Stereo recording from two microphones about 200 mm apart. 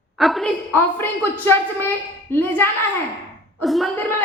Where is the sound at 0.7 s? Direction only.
10° left (ahead or behind).